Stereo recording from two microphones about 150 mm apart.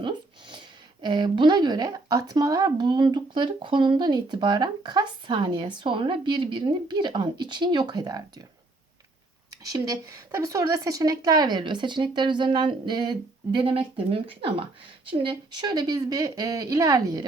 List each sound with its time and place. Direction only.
0.0 s a sound: 30° right (ahead or behind)
1.0 s speech: 30° right (ahead or behind)
9.7 s a woman's voice: 25° right (ahead or behind)